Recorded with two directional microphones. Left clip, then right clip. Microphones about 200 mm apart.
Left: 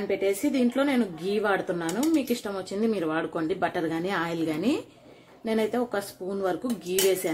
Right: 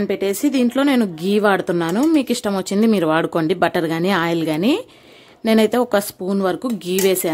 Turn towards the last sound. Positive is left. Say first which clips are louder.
# right 7 dB
turn(degrees=-50)  # may be behind; listen again after turning